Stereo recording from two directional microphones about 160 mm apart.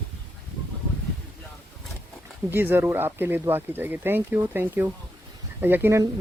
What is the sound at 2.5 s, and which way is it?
Speech, 15° right (ahead or behind).